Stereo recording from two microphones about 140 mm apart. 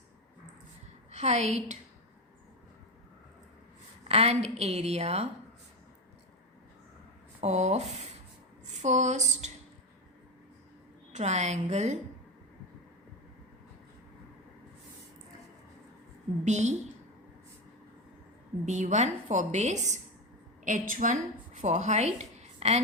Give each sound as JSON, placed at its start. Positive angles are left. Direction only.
{"t": 1.1, "sound": "a woman's voice", "side_deg": -55}
{"t": 4.1, "sound": "a woman's voice", "side_deg": -50}
{"t": 7.4, "sound": "a woman's voice", "side_deg": -55}
{"t": 11.1, "sound": "a woman's voice", "side_deg": -55}
{"t": 16.4, "sound": "a woman's voice", "side_deg": -55}
{"t": 18.6, "sound": "a woman's voice", "side_deg": -60}